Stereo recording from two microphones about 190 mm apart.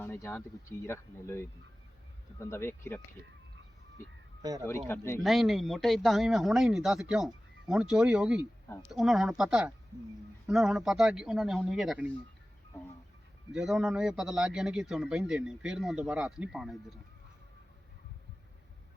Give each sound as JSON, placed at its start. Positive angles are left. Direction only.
{"t": 0.0, "sound": "speech", "side_deg": 10}
{"t": 4.9, "sound": "speech", "side_deg": 10}
{"t": 5.2, "sound": "speech", "side_deg": 0}
{"t": 13.5, "sound": "speech", "side_deg": -5}